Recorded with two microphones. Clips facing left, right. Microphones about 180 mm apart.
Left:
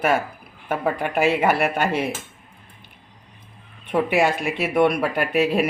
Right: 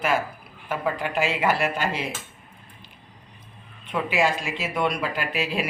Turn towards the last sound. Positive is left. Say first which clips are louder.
# left 7 dB
turn(degrees=55)  # may be behind; listen again after turning